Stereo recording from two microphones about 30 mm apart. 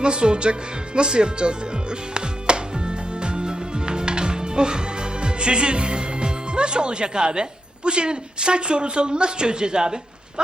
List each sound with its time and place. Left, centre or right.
0.0 s speech: right
0.9 s music: right
7.9 s speech: right